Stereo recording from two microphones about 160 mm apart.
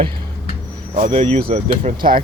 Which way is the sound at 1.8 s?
60° right (ahead or behind).